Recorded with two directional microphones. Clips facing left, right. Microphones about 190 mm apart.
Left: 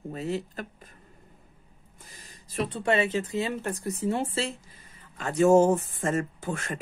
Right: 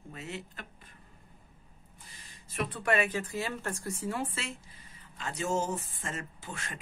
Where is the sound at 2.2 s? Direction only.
40° left (ahead or behind).